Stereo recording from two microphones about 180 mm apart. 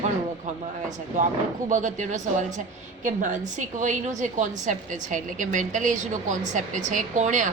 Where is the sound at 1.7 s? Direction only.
45° right (ahead or behind).